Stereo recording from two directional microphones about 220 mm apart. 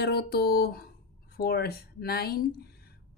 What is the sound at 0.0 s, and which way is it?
Speech, 45° left (ahead or behind).